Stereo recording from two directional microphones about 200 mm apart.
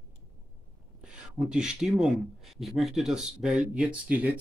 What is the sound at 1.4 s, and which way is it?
Speech, 5° right (ahead or behind).